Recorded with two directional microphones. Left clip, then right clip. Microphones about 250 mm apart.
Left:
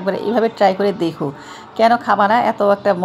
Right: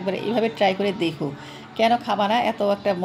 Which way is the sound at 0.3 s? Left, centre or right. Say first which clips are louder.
Left 6 dB; left.